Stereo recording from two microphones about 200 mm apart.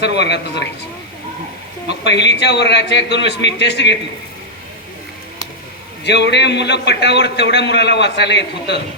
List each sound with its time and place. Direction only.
0.2 s a man's voice: 60° left (ahead or behind)
1.9 s a man's voice: 60° left (ahead or behind)
6.1 s a man's voice: 60° left (ahead or behind)